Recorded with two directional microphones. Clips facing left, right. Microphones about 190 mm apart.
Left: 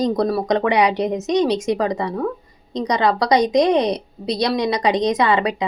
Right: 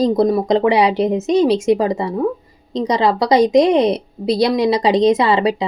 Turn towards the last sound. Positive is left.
turn(degrees=-30)  # may be behind; listen again after turning